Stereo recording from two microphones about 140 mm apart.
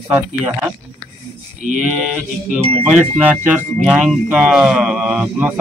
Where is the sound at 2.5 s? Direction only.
5° right (ahead or behind).